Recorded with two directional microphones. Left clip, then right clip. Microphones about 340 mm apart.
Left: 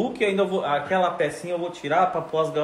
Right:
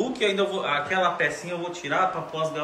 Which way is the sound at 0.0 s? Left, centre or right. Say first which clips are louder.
Left 1 dB; left.